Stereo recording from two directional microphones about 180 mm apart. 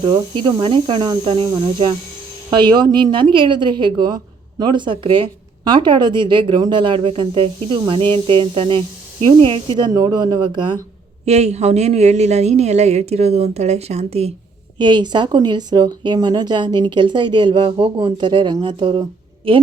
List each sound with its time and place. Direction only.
0.0 s speech: 25° right (ahead or behind)
11.3 s speech: 40° right (ahead or behind)
14.8 s speech: 25° right (ahead or behind)